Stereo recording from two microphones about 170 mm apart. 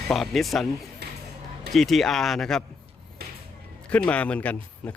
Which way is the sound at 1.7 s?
Centre (ahead or behind).